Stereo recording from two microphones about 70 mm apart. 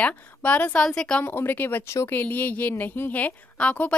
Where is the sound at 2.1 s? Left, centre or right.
Left.